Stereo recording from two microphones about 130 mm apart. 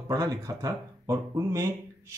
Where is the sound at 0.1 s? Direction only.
30° right (ahead or behind).